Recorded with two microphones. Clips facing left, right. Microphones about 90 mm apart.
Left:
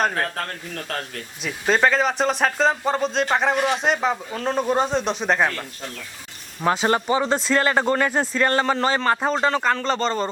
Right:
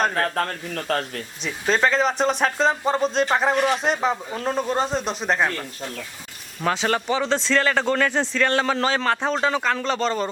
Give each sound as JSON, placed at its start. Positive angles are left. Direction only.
{"t": 0.3, "sound": "speech", "side_deg": -35}
{"t": 1.4, "sound": "speech", "side_deg": 5}
{"t": 6.8, "sound": "speech", "side_deg": 10}